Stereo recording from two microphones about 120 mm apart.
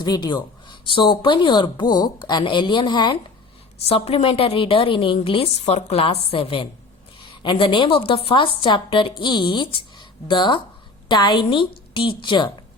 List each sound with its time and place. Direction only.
0.0 s speech: 40° left (ahead or behind)
3.8 s a woman's voice: 55° left (ahead or behind)
5.6 s a woman's voice: 60° left (ahead or behind); by 12.6 s 40° left (ahead or behind)